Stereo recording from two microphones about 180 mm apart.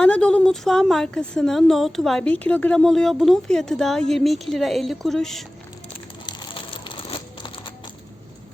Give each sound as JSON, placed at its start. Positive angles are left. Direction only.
{"t": 0.0, "sound": "speech", "side_deg": 5}
{"t": 6.2, "sound": "crumpling", "side_deg": 25}